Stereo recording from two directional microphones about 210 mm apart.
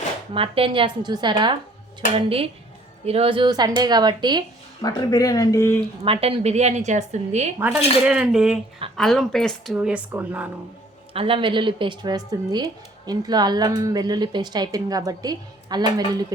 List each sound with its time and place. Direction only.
0.3 s a woman's voice: 25° right (ahead or behind)
4.8 s speech: 20° left (ahead or behind)
6.1 s a woman's voice: 25° right (ahead or behind)
8.0 s speech: 5° right (ahead or behind)
11.1 s a woman's voice: 25° right (ahead or behind)